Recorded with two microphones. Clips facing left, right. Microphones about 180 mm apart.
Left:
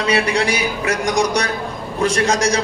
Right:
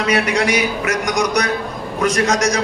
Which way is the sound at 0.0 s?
30° left (ahead or behind).